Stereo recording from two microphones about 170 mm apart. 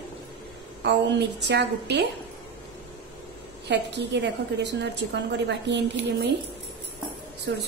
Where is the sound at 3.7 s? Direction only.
90° right.